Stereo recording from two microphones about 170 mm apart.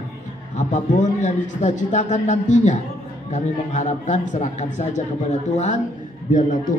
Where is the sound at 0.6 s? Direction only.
45° left (ahead or behind).